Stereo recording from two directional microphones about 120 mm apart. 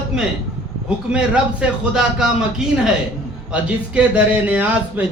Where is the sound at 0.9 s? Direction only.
10° right (ahead or behind).